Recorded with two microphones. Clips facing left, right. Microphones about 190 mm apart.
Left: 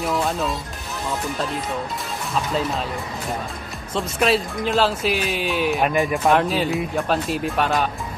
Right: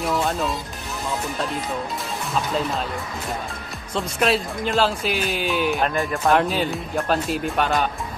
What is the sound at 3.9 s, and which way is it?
Speech, centre (ahead or behind).